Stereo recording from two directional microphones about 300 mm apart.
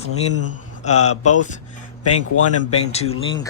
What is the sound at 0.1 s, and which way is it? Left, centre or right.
Speech, left.